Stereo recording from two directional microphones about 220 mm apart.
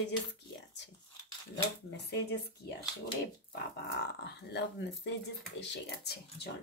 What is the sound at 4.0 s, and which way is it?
Speech, 50° left (ahead or behind).